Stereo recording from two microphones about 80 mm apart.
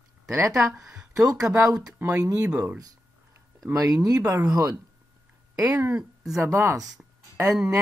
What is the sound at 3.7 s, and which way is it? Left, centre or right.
Speech, right.